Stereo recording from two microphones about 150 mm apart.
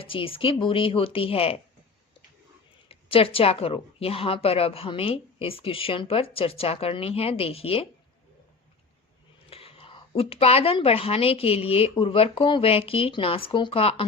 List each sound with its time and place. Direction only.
0.0 s a woman's voice: 35° left (ahead or behind)
2.9 s a woman's voice: 40° left (ahead or behind)
9.5 s a woman's voice: 40° left (ahead or behind)